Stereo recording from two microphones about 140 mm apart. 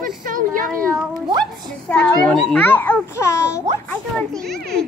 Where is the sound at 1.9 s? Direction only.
5° left (ahead or behind).